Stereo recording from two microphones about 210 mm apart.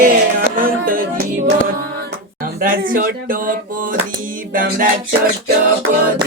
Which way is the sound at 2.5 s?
40° right (ahead or behind).